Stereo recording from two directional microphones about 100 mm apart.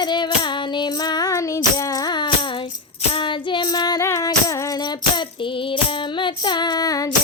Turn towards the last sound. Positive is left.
turn(degrees=40)  # may be behind; listen again after turning